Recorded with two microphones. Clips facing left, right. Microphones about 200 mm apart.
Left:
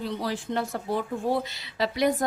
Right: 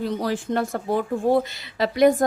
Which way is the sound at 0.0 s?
45° right (ahead or behind).